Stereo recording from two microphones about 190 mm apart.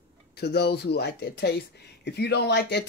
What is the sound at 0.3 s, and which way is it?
Speech, 60° left (ahead or behind).